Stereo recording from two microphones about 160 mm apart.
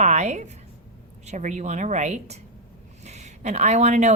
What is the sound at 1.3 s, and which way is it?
A woman's voice, 50° right (ahead or behind).